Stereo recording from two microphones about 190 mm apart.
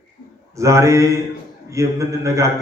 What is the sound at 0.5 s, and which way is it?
A man's voice, 15° right (ahead or behind).